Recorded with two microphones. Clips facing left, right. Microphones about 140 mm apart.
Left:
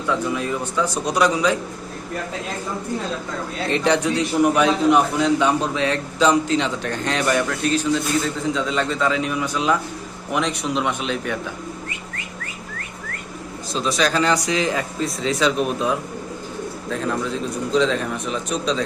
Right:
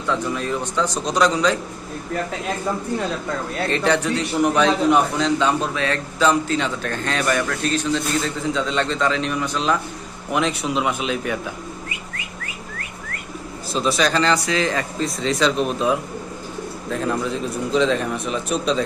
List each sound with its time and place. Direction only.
0.1 s a man's voice: 10° left (ahead or behind)
3.7 s a man's voice: 15° left (ahead or behind)
10.3 s speech: centre (ahead or behind)
13.7 s speech: 5° right (ahead or behind)
14.2 s a man's voice: 15° left (ahead or behind)
14.8 s speech: 5° left (ahead or behind)
17.7 s speech: 5° right (ahead or behind)